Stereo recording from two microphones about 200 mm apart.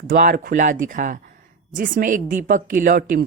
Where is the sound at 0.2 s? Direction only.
40° right (ahead or behind).